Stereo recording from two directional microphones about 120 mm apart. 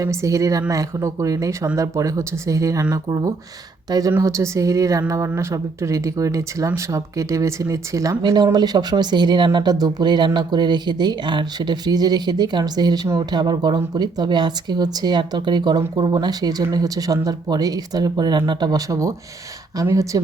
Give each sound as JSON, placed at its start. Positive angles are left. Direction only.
{"t": 0.0, "sound": "a woman's voice", "side_deg": -25}
{"t": 8.2, "sound": "a woman's voice", "side_deg": -35}